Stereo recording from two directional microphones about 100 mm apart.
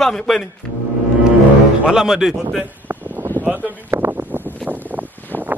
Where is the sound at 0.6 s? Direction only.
5° left (ahead or behind).